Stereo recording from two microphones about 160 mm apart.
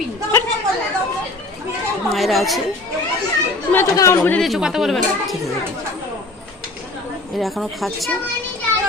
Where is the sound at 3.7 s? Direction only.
15° left (ahead or behind).